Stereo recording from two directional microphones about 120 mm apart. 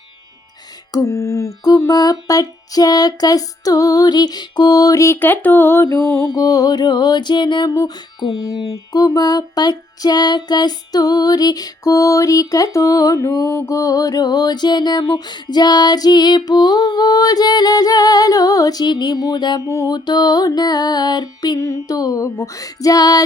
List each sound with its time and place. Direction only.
0.9 s music: 25° left (ahead or behind)
6.0 s mantra: 15° left (ahead or behind)
6.3 s music: 30° left (ahead or behind)
20.1 s music: 35° left (ahead or behind)